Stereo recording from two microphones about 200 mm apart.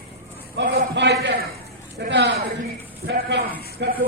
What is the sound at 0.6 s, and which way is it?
A man's voice, 55° right (ahead or behind).